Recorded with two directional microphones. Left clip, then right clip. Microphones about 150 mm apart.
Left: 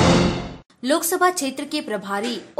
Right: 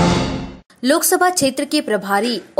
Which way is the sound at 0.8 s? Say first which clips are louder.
Right 4 dB; 35° right (ahead or behind).